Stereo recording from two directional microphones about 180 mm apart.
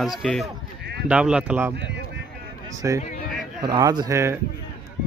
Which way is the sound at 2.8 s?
15° right (ahead or behind).